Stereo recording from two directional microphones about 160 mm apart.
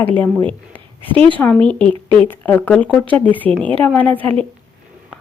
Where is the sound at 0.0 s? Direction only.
10° left (ahead or behind).